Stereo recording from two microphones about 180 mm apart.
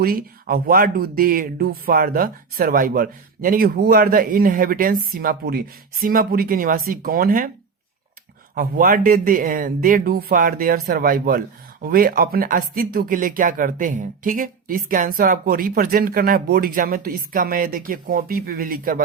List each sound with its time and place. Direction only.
0.0 s speech: 55° right (ahead or behind)
8.5 s speech: 50° right (ahead or behind)